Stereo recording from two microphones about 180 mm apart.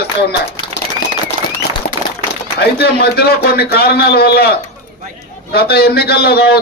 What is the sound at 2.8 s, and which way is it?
Speech, 60° left (ahead or behind).